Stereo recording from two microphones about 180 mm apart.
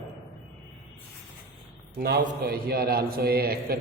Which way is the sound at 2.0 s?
60° right (ahead or behind).